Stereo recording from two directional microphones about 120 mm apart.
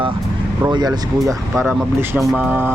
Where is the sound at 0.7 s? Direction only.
35° right (ahead or behind).